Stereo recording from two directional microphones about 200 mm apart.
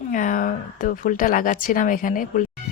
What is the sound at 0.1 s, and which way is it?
Speech, 40° left (ahead or behind).